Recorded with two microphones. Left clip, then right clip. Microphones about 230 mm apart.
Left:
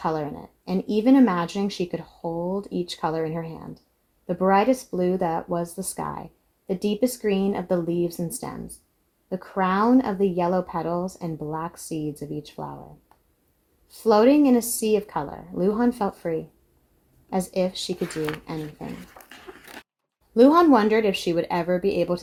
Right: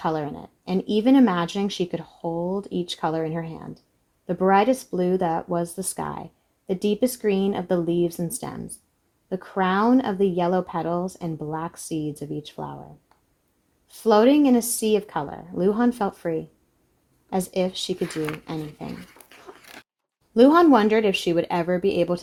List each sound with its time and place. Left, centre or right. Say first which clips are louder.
0.0 s speech: right 1 dB; right
18.0 s speech: left 2 dB; centre
18.4 s speech: right 1 dB; right
19.3 s dog: left 2 dB; centre
20.3 s speech: right 1 dB; right